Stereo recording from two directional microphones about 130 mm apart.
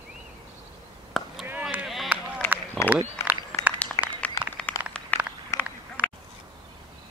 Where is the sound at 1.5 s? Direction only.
10° right (ahead or behind).